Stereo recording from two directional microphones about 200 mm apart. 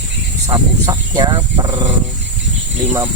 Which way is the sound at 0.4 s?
20° right (ahead or behind).